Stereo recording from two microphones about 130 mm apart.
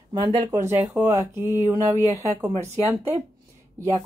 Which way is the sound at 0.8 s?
5° right (ahead or behind).